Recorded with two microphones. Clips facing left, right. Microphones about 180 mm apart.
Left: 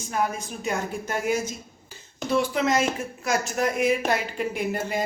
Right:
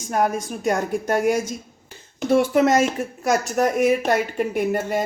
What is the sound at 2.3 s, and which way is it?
Speech, 50° right (ahead or behind).